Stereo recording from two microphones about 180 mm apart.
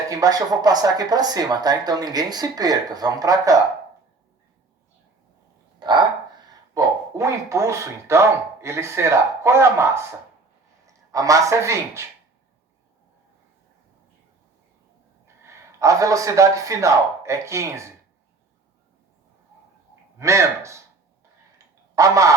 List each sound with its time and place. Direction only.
0.1 s speech: 20° right (ahead or behind)
5.8 s a sound: 25° right (ahead or behind)
6.5 s speech: 15° right (ahead or behind)
15.4 s speech: 15° right (ahead or behind)
20.1 s a man's voice: 15° right (ahead or behind)
21.9 s a man's voice: 15° right (ahead or behind)